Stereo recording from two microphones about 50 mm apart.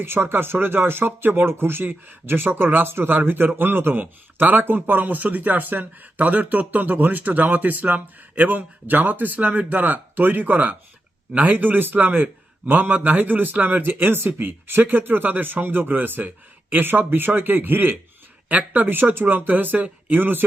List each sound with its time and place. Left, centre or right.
0.0 s speech: right
2.8 s speech: right
18.4 s speech: right